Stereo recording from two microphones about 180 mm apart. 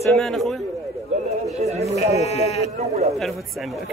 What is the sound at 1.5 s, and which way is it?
Speech, 35° right (ahead or behind).